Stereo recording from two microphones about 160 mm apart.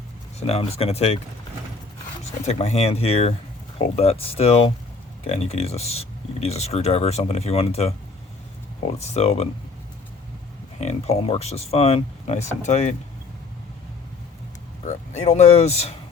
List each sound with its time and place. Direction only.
0.3 s speech: 40° left (ahead or behind)
2.4 s speech: 40° left (ahead or behind)
9.0 s speech: 40° left (ahead or behind)
10.8 s speech: 40° left (ahead or behind)
14.8 s speech: 40° left (ahead or behind)